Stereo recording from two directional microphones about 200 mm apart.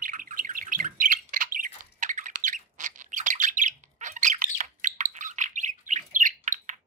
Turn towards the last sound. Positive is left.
turn(degrees=-40)  # may be behind; listen again after turning